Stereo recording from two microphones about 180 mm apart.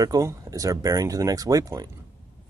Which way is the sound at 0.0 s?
20° right (ahead or behind).